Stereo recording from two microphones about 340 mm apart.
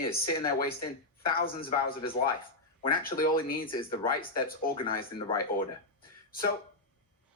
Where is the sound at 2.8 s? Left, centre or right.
Left.